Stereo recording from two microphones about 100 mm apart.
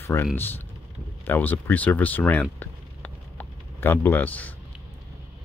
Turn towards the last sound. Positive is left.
turn(degrees=15)  # may be behind; listen again after turning